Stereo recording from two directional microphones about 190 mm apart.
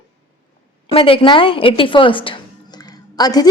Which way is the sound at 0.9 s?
30° left (ahead or behind).